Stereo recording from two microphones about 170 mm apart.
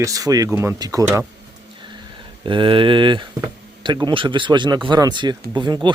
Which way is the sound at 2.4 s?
30° right (ahead or behind).